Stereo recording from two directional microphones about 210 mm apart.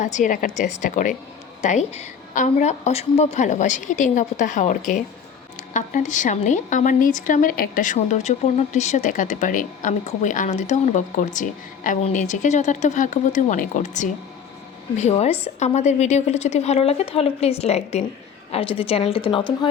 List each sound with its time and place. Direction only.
0.0 s a woman's voice: 35° left (ahead or behind)